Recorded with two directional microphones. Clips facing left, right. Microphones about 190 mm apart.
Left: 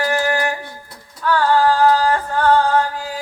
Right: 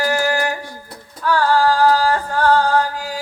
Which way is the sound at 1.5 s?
15° left (ahead or behind).